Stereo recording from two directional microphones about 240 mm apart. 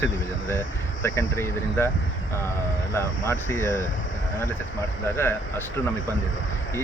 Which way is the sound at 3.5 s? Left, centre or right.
Left.